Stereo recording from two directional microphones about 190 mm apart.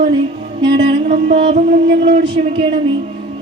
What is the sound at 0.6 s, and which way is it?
Music, 60° right (ahead or behind).